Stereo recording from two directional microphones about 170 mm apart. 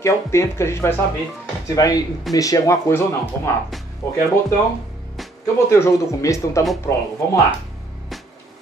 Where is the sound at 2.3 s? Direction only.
20° left (ahead or behind).